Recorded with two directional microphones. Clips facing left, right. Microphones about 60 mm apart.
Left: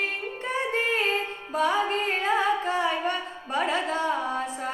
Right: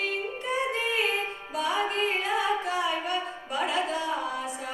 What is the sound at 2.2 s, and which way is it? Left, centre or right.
Music, left.